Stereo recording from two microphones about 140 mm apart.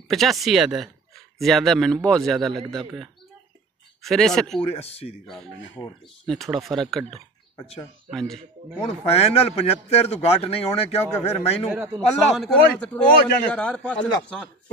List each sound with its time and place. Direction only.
0.1 s a man's voice: centre (ahead or behind)
4.0 s a man's voice: 5° left (ahead or behind)
4.6 s speech: 45° left (ahead or behind)
6.2 s a man's voice: centre (ahead or behind)
8.8 s speech: 45° left (ahead or behind)
11.9 s speech: 5° left (ahead or behind)